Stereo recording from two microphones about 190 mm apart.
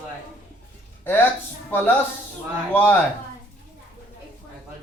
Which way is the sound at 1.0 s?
10° left (ahead or behind).